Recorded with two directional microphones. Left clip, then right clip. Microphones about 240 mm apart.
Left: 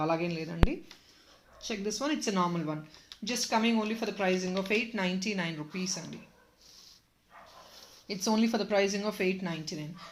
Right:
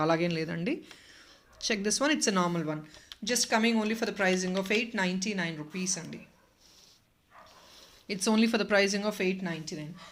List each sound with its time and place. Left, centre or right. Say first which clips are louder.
0.0 s a woman's voice: right 3 dB; right; by 5.8 s centre
8.0 s a woman's voice: right 2 dB; right; by 10.1 s centre